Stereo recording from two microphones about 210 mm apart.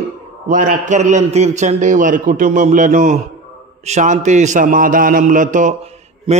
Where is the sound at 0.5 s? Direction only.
35° right (ahead or behind).